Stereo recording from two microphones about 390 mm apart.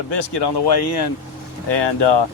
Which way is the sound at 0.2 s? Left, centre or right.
Left.